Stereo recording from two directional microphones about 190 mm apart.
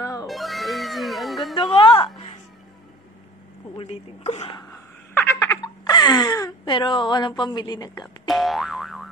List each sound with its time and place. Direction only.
0.0 s cat: 15° left (ahead or behind)
0.3 s music: centre (ahead or behind)
1.8 s a woman's voice: 30° left (ahead or behind)
3.7 s a woman's voice: 30° left (ahead or behind)
5.1 s a sound: 15° left (ahead or behind)
8.0 s boing: centre (ahead or behind)